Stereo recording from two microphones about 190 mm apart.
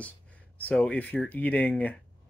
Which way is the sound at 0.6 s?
5° left (ahead or behind).